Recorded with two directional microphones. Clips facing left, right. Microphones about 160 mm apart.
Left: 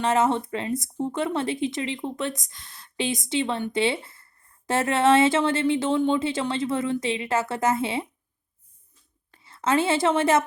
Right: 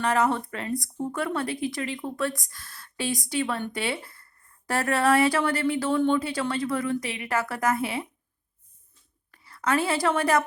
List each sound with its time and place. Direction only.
0.0 s speech: 25° left (ahead or behind)
9.3 s a woman's voice: 25° left (ahead or behind)